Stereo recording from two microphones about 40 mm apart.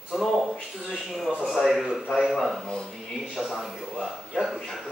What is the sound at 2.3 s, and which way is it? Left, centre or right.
Speech, centre.